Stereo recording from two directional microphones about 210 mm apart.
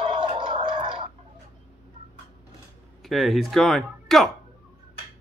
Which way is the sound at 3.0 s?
Centre (ahead or behind).